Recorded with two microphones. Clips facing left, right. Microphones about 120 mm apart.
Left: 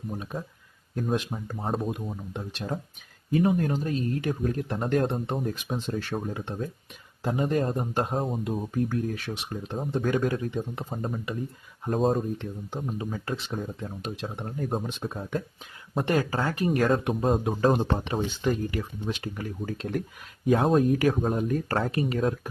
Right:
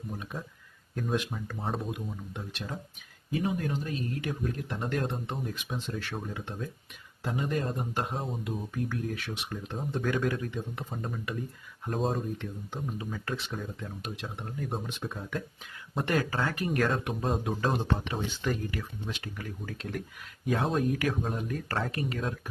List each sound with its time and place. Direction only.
0.1 s speech: 25° left (ahead or behind)
3.3 s speech: 45° left (ahead or behind)
12.4 s speech: 30° left (ahead or behind)
20.5 s speech: 40° left (ahead or behind)